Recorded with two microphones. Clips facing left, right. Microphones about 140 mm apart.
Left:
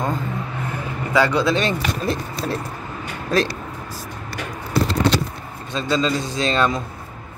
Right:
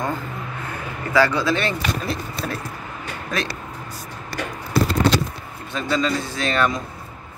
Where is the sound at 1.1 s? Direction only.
20° left (ahead or behind).